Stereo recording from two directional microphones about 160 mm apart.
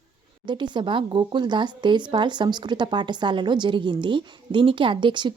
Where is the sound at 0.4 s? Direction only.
30° right (ahead or behind).